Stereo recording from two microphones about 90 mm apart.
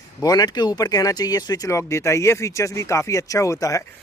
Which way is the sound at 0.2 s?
45° left (ahead or behind).